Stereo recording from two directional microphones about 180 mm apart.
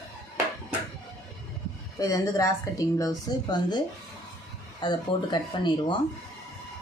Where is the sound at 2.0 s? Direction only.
20° left (ahead or behind).